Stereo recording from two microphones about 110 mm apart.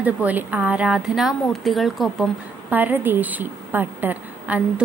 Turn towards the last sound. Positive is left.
turn(degrees=-15)  # may be behind; listen again after turning